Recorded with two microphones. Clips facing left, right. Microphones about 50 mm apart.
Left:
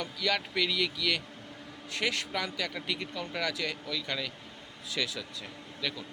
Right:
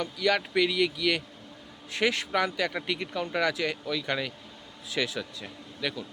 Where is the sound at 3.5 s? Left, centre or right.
Right.